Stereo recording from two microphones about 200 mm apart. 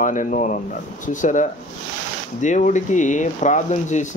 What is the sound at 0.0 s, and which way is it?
Speech, 40° left (ahead or behind).